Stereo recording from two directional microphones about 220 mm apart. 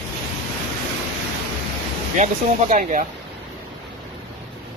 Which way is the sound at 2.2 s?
35° right (ahead or behind).